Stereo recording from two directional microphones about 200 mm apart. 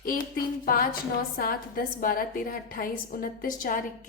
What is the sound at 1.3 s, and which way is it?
A woman's voice, 45° left (ahead or behind).